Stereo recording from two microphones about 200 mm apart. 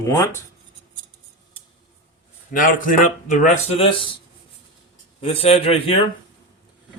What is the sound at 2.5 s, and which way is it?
A man's voice, 40° left (ahead or behind).